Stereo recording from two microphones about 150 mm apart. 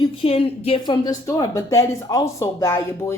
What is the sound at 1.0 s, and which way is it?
Speech, 25° left (ahead or behind).